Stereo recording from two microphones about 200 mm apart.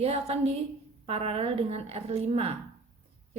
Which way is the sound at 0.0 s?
30° right (ahead or behind).